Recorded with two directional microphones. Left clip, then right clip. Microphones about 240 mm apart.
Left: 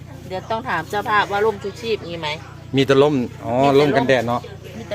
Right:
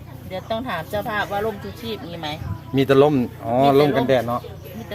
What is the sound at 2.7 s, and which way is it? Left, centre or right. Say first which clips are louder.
Speech: left 1 dB; centre.